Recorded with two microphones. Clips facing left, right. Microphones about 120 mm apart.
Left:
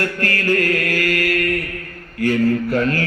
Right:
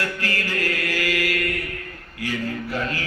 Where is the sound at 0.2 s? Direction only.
55° left (ahead or behind).